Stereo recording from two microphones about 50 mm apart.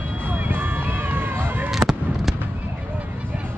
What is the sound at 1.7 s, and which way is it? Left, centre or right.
Honk, centre.